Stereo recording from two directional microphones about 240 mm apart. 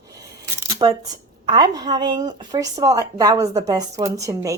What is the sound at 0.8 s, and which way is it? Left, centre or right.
Speech, centre.